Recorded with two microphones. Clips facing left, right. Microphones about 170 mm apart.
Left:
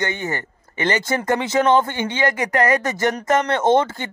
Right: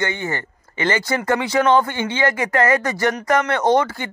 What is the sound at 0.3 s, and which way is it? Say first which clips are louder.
Speech: even; 20° left (ahead or behind).